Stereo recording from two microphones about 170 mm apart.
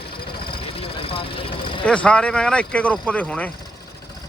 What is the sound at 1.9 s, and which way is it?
Speech, 5° left (ahead or behind).